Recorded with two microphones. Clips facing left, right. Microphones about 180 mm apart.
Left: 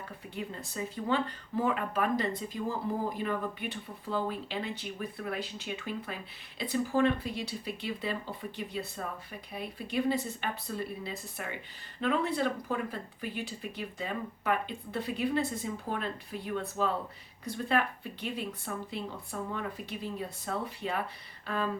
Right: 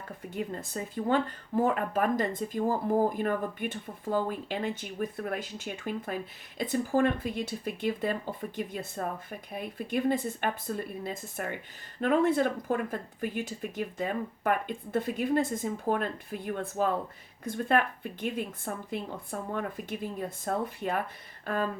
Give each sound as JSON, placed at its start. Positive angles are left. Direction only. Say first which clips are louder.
{"t": 0.3, "sound": "speech", "louder": "right 3 dB", "side_deg": -50}